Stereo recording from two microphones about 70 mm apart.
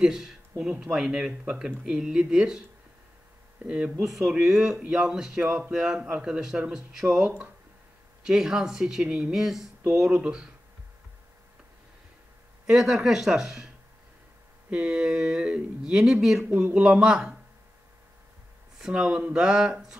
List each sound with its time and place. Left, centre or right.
0.0 s speech: centre
3.6 s speech: centre
8.3 s speech: centre
12.6 s speech: centre
14.7 s speech: centre
18.8 s speech: centre